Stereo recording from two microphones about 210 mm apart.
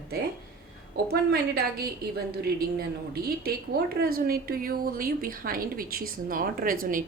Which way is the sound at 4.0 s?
45° right (ahead or behind).